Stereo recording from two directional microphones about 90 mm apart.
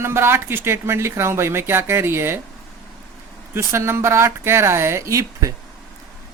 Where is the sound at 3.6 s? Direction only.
30° right (ahead or behind).